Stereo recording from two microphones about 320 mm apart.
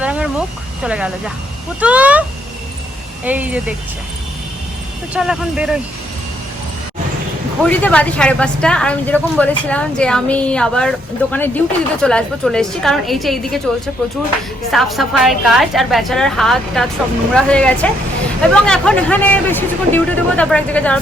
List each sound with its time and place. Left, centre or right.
0.0 s speech: centre
3.2 s speech: centre
5.1 s speech: centre
7.6 s speech: centre
14.7 s speech: centre